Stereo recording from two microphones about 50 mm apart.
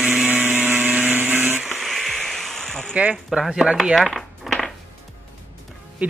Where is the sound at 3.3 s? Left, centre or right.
Centre.